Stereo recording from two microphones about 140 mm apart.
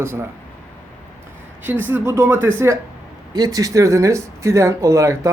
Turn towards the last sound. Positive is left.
turn(degrees=-20)  # may be behind; listen again after turning